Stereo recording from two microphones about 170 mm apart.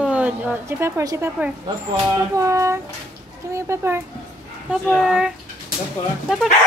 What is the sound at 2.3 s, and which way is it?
Child singing, 20° right (ahead or behind).